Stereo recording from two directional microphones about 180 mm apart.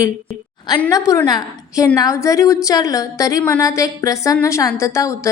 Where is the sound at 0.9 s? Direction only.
20° left (ahead or behind).